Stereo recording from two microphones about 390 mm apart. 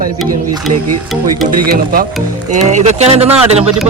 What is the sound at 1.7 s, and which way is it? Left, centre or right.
Speech, right.